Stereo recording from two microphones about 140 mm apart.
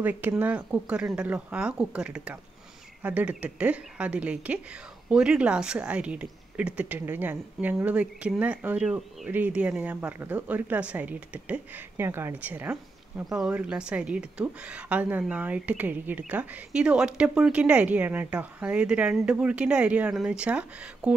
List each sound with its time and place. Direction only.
0.0 s a woman's voice: 15° right (ahead or behind)